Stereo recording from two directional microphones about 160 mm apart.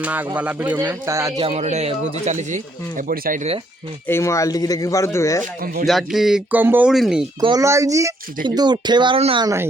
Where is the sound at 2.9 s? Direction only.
65° right (ahead or behind).